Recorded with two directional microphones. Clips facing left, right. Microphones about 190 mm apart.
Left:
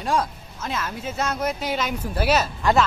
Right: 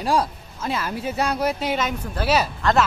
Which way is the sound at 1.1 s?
15° right (ahead or behind).